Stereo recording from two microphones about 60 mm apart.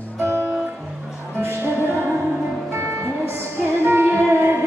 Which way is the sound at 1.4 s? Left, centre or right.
Right.